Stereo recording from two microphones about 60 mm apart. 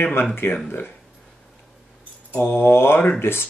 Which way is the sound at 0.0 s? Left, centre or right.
Left.